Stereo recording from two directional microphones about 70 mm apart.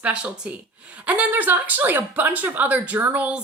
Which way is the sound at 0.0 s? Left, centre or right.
Centre.